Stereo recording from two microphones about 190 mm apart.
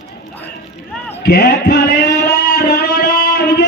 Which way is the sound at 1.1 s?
60° left (ahead or behind).